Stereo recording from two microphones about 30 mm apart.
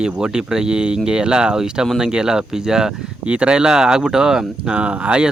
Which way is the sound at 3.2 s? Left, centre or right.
Right.